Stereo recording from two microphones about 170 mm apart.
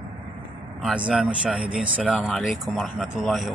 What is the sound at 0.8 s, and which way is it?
Speech, 5° right (ahead or behind).